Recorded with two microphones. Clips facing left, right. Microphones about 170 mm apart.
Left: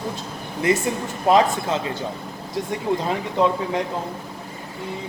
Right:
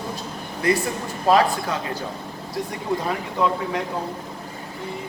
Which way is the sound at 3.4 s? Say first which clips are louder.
Left 3 dB; 20° left (ahead or behind).